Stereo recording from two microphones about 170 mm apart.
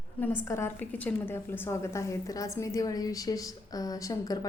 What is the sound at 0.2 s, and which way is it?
A woman's voice, 10° left (ahead or behind).